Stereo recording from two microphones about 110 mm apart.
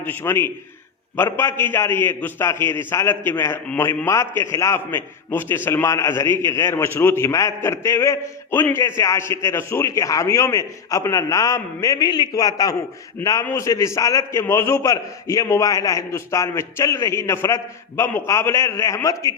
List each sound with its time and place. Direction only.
0.0 s a man's voice: 20° left (ahead or behind)